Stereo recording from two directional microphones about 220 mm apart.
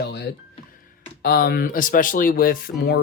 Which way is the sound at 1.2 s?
45° left (ahead or behind).